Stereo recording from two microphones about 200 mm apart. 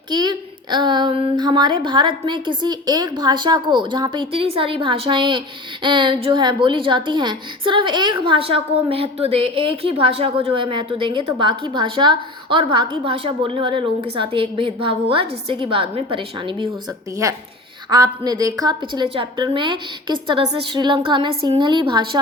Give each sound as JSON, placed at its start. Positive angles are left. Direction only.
{"t": 0.1, "sound": "a woman's voice", "side_deg": -20}